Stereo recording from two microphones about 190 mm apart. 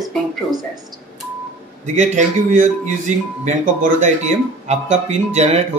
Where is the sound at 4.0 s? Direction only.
40° right (ahead or behind).